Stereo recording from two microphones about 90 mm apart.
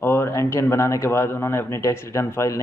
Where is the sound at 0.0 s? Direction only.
25° left (ahead or behind).